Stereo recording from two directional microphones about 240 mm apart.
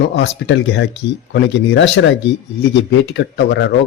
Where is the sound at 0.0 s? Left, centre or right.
Left.